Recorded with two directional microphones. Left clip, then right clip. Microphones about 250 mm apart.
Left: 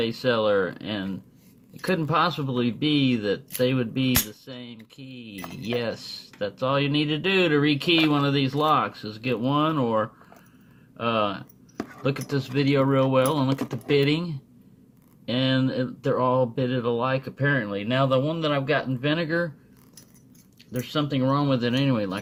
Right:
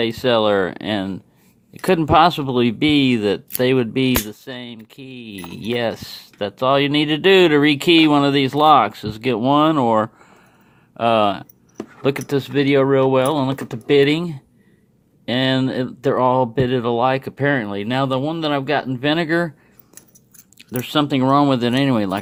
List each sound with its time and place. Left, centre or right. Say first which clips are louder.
0.0 s speech: right 6 dB; right
20.6 s speech: right 8 dB; right